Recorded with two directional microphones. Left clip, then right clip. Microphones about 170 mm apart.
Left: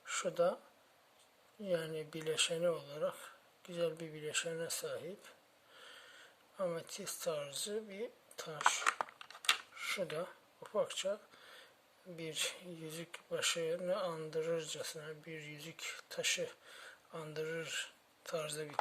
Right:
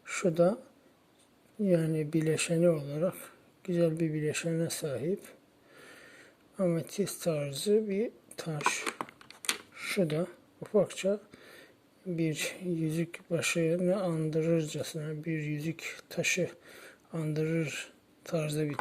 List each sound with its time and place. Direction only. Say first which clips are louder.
0.0 s speech: right 7 dB; 25° right (ahead or behind)
1.6 s speech: right 9 dB; 25° right (ahead or behind)
8.8 s speech: left 1 dB; 20° left (ahead or behind)
9.7 s a sound: right 8 dB; 25° right (ahead or behind)
12.1 s speech: right 7 dB; 25° right (ahead or behind)